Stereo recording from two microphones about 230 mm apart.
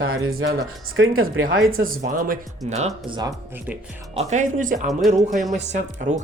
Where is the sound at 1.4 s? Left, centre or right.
Right; by 3.3 s centre.